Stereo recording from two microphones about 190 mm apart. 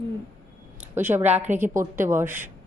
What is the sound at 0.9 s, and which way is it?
A woman's voice, 10° right (ahead or behind).